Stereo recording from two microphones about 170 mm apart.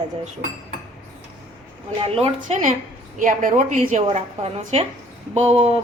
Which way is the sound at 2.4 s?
45° right (ahead or behind).